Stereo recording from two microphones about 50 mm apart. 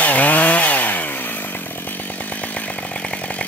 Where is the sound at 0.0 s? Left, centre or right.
Left.